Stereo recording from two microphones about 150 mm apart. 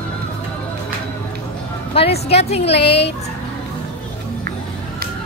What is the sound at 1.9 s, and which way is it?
Speech, 40° left (ahead or behind).